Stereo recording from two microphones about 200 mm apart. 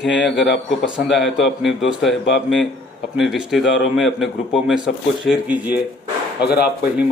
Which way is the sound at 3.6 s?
65° left (ahead or behind).